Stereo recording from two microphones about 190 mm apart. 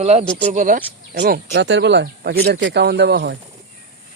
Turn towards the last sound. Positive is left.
turn(degrees=-65)  # may be behind; listen again after turning